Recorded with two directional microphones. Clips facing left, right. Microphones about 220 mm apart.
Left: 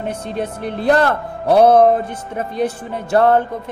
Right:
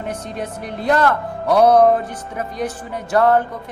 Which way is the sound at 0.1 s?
30° left (ahead or behind).